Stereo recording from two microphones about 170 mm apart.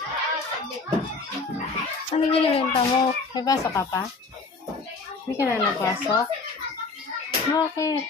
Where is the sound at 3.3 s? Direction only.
20° left (ahead or behind).